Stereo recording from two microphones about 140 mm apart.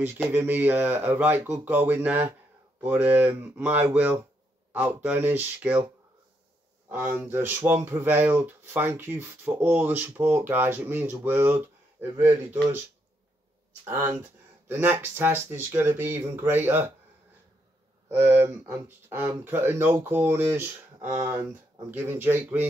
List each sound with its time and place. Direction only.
0.0 s speech: 15° right (ahead or behind)
6.9 s speech: 10° right (ahead or behind)
13.8 s speech: 15° right (ahead or behind)
18.0 s speech: 15° right (ahead or behind)